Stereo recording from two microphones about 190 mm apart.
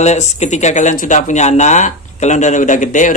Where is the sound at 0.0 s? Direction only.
35° left (ahead or behind).